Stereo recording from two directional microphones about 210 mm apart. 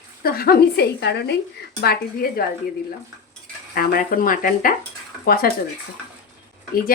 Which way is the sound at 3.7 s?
40° left (ahead or behind).